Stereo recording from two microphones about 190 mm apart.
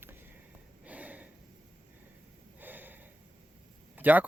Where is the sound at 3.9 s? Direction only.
10° right (ahead or behind).